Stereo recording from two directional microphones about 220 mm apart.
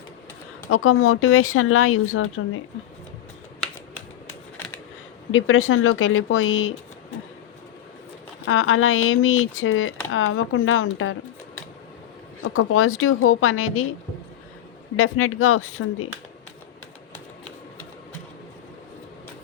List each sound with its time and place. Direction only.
0.7 s speech: 75° left (ahead or behind)
4.6 s a sound: 10° left (ahead or behind)
5.3 s a woman's voice: 65° left (ahead or behind)
8.4 s a woman's voice: 70° left (ahead or behind)
12.4 s speech: 70° left (ahead or behind)
14.9 s speech: 70° left (ahead or behind)